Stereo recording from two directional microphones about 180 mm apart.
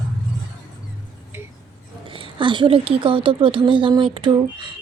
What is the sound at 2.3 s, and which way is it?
Speech, 25° right (ahead or behind).